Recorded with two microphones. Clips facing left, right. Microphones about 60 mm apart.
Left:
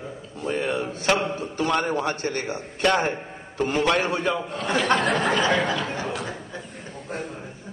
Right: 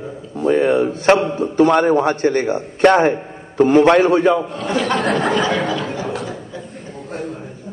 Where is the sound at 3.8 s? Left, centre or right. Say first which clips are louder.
Right 8 dB; right.